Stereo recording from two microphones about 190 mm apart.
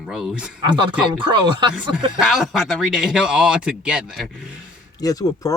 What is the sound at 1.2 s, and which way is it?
Speech, 25° right (ahead or behind).